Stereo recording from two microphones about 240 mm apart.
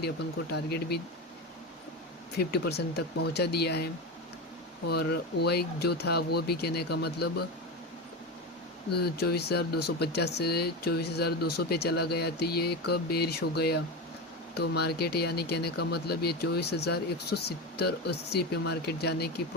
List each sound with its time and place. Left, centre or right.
0.5 s speech: left
2.4 s speech: left
4.9 s speech: left
9.0 s speech: left